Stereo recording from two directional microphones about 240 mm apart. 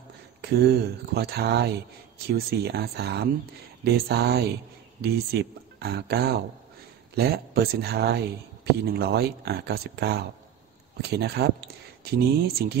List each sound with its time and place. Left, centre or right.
0.4 s speech: right